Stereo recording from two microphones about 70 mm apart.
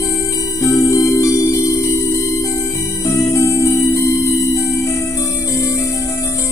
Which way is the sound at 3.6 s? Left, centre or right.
Left.